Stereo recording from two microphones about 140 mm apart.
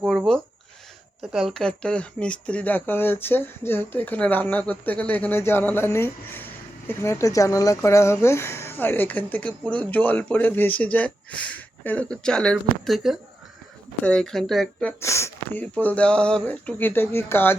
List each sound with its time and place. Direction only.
1.2 s speech: 5° right (ahead or behind)
15.0 s speech: 20° left (ahead or behind)
15.6 s speech: 10° left (ahead or behind)